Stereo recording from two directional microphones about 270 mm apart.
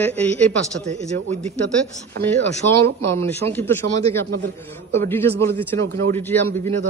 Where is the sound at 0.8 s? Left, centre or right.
Right.